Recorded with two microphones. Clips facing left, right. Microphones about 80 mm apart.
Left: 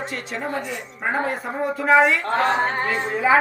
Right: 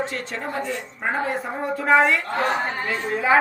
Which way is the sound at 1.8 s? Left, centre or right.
Centre.